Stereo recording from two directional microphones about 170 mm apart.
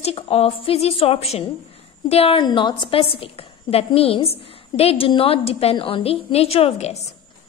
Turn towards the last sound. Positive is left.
turn(degrees=40)  # may be behind; listen again after turning